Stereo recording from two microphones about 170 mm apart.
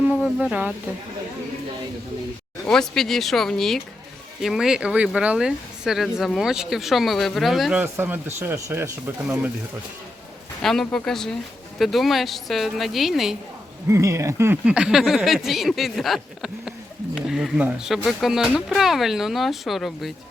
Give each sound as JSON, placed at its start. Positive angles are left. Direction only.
{"t": 0.2, "sound": "speech", "side_deg": 0}
{"t": 2.6, "sound": "speech", "side_deg": 5}
{"t": 7.8, "sound": "speech", "side_deg": -10}
{"t": 10.6, "sound": "speech", "side_deg": 0}
{"t": 13.8, "sound": "speech", "side_deg": -15}